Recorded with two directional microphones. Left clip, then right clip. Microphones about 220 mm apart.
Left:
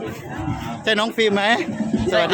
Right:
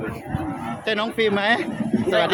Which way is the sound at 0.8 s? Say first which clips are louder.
Left 3 dB; 15° left (ahead or behind).